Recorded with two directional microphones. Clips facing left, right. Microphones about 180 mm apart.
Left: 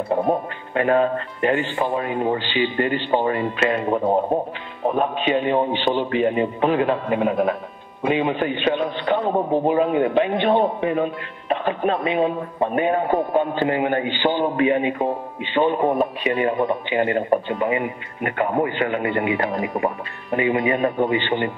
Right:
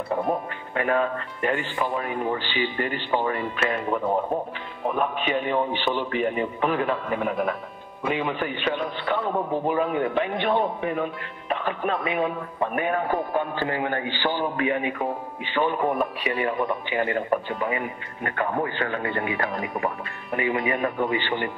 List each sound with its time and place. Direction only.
0.3 s a man's voice: 30° left (ahead or behind)
9.2 s a man's voice: 35° left (ahead or behind)
9.5 s a man's voice: 25° left (ahead or behind)